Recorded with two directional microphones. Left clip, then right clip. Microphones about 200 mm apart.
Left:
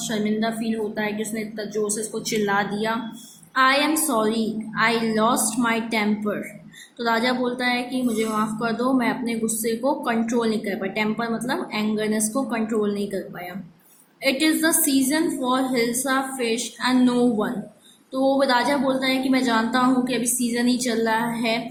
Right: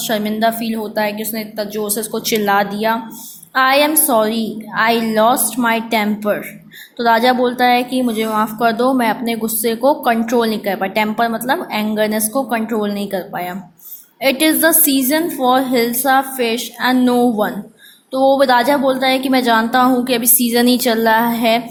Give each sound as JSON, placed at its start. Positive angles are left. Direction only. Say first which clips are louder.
{"t": 0.1, "sound": "speech", "louder": "right 9 dB", "side_deg": -40}